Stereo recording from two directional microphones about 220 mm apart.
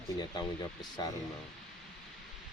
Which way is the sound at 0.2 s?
20° left (ahead or behind).